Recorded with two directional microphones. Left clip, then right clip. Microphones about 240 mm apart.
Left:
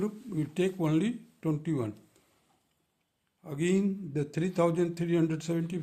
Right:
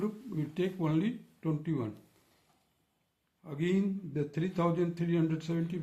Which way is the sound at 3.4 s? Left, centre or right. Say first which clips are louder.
Left 3 dB; left.